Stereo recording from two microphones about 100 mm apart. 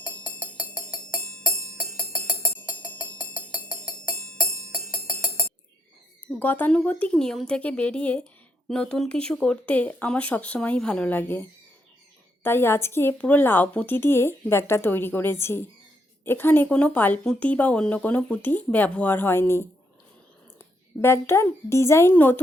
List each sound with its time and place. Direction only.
6.4 s a woman's voice: 20° left (ahead or behind)
21.0 s a woman's voice: 25° left (ahead or behind)